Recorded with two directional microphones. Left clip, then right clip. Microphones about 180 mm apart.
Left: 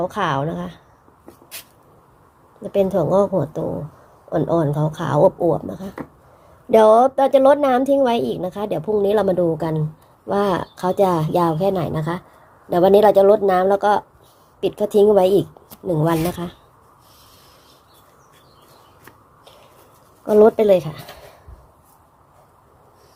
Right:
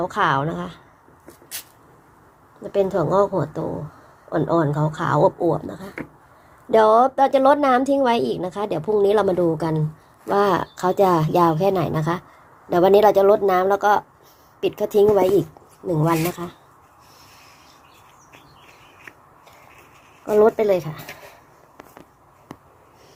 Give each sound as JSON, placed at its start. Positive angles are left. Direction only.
{"t": 0.0, "sound": "a woman's voice", "side_deg": 15}
{"t": 2.7, "sound": "a woman's voice", "side_deg": 20}
{"t": 12.7, "sound": "speech", "side_deg": 15}
{"t": 20.2, "sound": "speech", "side_deg": 25}